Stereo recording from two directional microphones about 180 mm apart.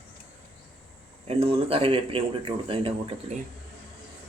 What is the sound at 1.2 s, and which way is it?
Speech, 30° right (ahead or behind).